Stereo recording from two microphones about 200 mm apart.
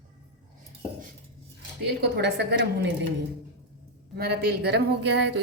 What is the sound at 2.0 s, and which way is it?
Speech, 55° right (ahead or behind).